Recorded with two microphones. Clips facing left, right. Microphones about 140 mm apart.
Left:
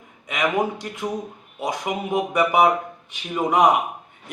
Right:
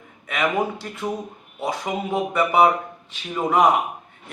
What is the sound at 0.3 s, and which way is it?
A man's voice, 15° left (ahead or behind).